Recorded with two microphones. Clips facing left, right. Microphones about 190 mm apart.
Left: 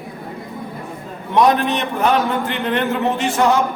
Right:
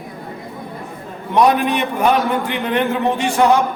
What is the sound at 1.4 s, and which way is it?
A man's voice, 10° right (ahead or behind).